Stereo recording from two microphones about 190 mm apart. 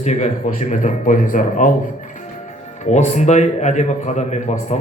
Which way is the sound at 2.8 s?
40° left (ahead or behind).